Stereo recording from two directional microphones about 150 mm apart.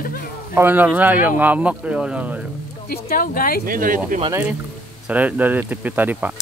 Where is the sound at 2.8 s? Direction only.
80° left.